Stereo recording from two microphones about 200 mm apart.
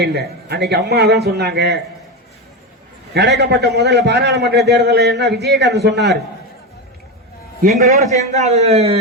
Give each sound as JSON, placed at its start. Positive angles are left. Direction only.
{"t": 0.0, "sound": "a man's voice", "side_deg": -55}
{"t": 3.2, "sound": "a man's voice", "side_deg": -55}
{"t": 7.6, "sound": "a man's voice", "side_deg": -40}